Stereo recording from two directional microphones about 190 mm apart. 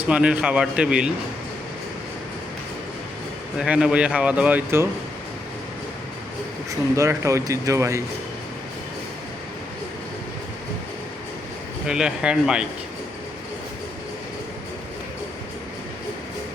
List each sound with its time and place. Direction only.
0.1 s speech: 5° right (ahead or behind)
3.6 s speech: 5° right (ahead or behind)
6.7 s speech: 15° right (ahead or behind)
11.9 s speech: 5° right (ahead or behind)